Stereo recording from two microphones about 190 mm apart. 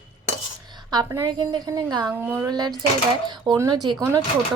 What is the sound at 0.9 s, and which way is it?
Speech, 20° right (ahead or behind).